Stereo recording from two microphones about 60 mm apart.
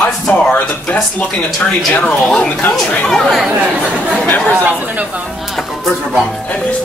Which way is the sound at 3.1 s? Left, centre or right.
Centre.